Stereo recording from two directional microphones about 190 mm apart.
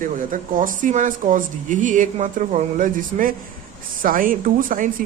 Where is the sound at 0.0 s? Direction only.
45° right (ahead or behind).